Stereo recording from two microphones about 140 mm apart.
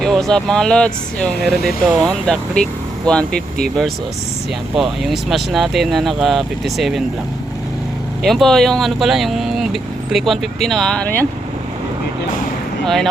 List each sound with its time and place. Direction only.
0.0 s speech: centre (ahead or behind)
8.2 s speech: centre (ahead or behind)
12.8 s speech: centre (ahead or behind)